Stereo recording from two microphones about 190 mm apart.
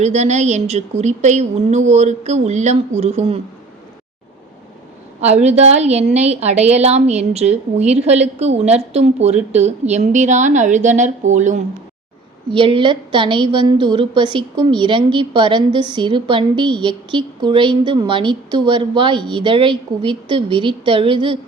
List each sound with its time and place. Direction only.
0.0 s a woman's voice: 35° right (ahead or behind)
5.2 s a woman's voice: 35° right (ahead or behind)
12.5 s a woman's voice: 25° right (ahead or behind)